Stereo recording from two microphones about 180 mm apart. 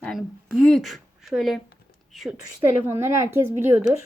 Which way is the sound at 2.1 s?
Centre (ahead or behind).